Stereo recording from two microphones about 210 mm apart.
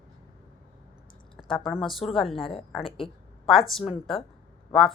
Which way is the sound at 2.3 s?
25° left (ahead or behind).